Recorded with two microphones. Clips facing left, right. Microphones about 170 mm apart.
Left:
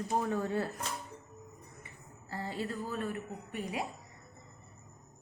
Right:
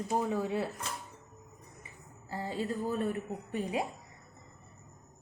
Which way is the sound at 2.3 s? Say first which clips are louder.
Right 3 dB; 15° right (ahead or behind).